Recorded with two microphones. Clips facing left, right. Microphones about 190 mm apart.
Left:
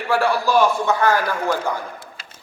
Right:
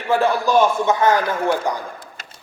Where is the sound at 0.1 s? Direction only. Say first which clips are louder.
Right 2 dB; 20° right (ahead or behind).